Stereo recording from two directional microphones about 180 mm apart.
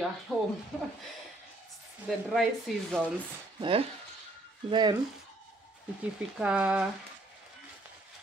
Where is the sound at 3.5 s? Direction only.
30° right (ahead or behind).